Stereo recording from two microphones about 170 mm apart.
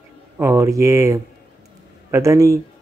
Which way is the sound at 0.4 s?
15° right (ahead or behind).